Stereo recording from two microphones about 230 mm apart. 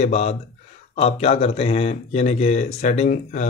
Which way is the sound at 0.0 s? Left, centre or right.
Left.